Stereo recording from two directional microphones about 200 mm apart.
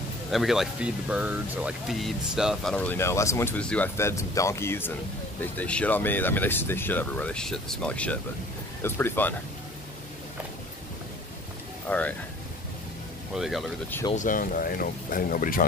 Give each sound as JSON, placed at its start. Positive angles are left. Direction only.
{"t": 0.3, "sound": "speech", "side_deg": 0}
{"t": 11.9, "sound": "speech", "side_deg": 10}
{"t": 13.3, "sound": "speech", "side_deg": 0}
{"t": 14.1, "sound": "speech", "side_deg": 40}